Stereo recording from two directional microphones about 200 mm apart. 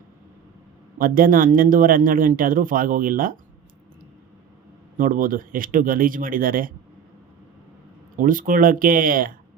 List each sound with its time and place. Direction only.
0.9 s a man's voice: 45° right (ahead or behind)
4.9 s a man's voice: 45° right (ahead or behind)
8.1 s a man's voice: 45° right (ahead or behind)